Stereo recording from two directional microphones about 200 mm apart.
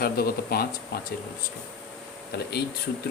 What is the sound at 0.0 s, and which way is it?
Speech, 50° left (ahead or behind).